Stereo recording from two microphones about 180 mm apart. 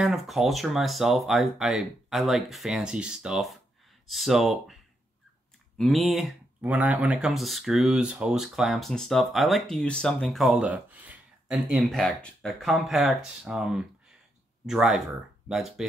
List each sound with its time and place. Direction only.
0.0 s speech: centre (ahead or behind)
5.8 s speech: centre (ahead or behind)